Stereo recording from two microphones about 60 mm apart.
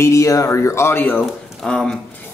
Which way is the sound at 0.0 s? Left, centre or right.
Left.